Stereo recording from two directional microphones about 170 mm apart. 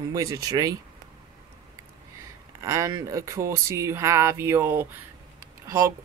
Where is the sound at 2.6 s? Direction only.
20° right (ahead or behind).